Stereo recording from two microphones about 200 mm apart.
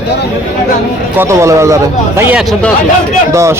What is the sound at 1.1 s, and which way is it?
Speech, 15° right (ahead or behind).